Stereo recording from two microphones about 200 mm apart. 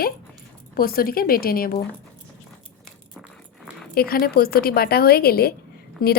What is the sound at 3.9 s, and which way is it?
A woman's voice, 50° left (ahead or behind).